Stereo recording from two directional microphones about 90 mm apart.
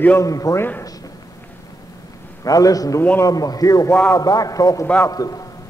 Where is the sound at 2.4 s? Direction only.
40° left (ahead or behind).